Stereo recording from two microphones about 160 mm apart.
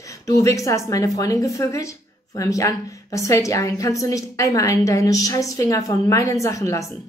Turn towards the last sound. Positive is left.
turn(degrees=20)  # may be behind; listen again after turning